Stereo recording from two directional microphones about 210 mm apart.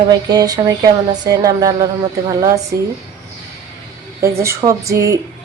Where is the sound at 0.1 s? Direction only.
20° right (ahead or behind).